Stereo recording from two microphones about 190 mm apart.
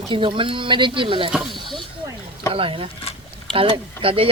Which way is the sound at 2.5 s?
30° right (ahead or behind).